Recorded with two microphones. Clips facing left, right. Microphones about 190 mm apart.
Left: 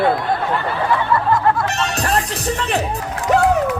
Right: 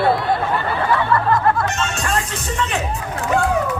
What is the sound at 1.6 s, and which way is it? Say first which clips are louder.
Speech: left 2 dB; 35° left (ahead or behind).